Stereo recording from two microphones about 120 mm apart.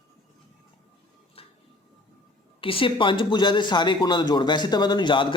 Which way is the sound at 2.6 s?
50° left (ahead or behind).